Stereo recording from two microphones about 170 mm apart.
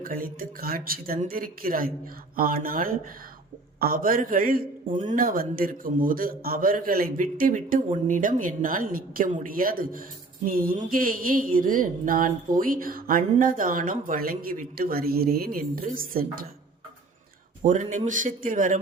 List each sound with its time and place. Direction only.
0.0 s speech: 55° right (ahead or behind)
17.6 s speech: 50° right (ahead or behind)